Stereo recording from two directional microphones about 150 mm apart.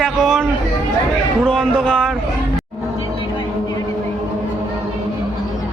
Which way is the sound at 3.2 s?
30° left (ahead or behind).